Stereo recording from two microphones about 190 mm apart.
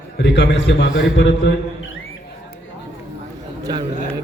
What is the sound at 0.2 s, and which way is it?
A man's voice, 70° left (ahead or behind).